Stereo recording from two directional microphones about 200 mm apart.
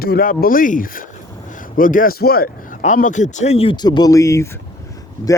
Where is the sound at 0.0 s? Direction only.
50° left (ahead or behind).